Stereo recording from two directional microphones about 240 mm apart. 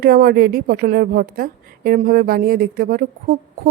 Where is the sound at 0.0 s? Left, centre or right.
Right.